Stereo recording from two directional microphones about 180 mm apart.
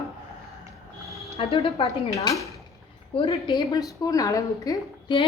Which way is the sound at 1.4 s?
35° left (ahead or behind).